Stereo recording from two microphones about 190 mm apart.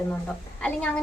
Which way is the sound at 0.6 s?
5° left (ahead or behind).